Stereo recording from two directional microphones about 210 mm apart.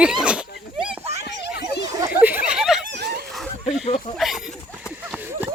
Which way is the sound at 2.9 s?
50° right (ahead or behind).